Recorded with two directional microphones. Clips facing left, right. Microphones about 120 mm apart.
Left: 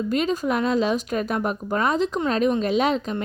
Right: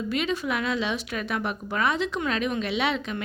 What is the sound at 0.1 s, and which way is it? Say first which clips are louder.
Speech: left 4 dB; 40° left (ahead or behind).